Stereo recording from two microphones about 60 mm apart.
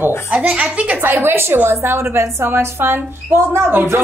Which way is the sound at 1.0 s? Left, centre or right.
Right.